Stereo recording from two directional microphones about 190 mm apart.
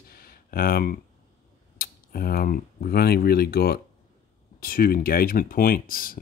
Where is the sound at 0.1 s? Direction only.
50° left (ahead or behind).